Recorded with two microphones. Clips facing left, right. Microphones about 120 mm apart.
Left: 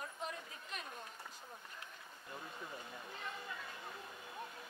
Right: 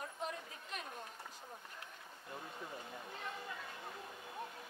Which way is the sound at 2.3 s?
30° right (ahead or behind).